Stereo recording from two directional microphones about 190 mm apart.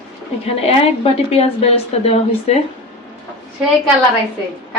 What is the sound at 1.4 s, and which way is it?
A woman's voice, 30° left (ahead or behind).